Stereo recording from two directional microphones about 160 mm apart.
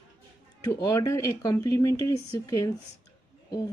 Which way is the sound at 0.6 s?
20° left (ahead or behind).